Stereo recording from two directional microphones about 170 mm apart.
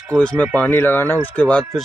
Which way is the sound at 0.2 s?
5° left (ahead or behind).